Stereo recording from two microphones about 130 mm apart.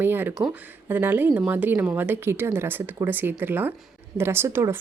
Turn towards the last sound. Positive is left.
turn(degrees=-20)  # may be behind; listen again after turning